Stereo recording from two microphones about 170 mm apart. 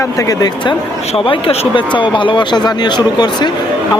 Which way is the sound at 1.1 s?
30° left (ahead or behind).